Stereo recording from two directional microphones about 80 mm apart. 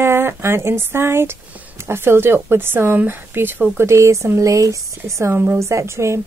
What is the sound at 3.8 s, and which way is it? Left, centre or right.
Speech, right.